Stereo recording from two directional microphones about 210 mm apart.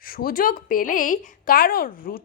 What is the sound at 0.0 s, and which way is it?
A woman's voice, 45° left (ahead or behind).